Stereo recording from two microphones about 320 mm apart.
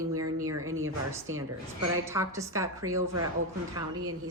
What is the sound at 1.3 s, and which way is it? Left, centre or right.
Speech, right.